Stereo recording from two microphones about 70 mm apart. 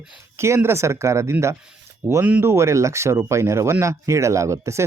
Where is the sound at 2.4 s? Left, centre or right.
Right.